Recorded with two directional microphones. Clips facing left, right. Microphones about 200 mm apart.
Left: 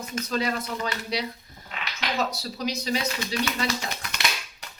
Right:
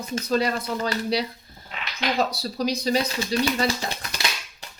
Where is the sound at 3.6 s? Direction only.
30° right (ahead or behind).